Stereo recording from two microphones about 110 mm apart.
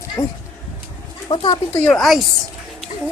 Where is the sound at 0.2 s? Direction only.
35° left (ahead or behind).